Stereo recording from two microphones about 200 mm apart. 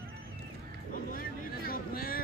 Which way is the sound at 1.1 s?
45° left (ahead or behind).